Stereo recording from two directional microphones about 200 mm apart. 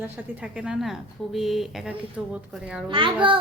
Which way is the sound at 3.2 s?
25° right (ahead or behind).